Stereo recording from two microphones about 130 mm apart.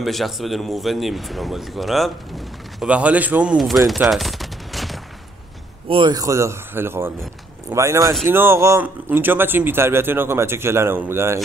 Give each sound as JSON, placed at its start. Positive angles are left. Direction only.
{"t": 0.0, "sound": "a man's voice", "side_deg": 0}
{"t": 3.8, "sound": "fusillade", "side_deg": 0}
{"t": 5.9, "sound": "a man's voice", "side_deg": -40}
{"t": 6.1, "sound": "speech", "side_deg": -25}